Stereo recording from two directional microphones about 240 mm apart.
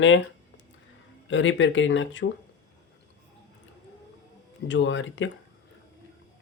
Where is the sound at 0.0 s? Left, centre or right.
Left.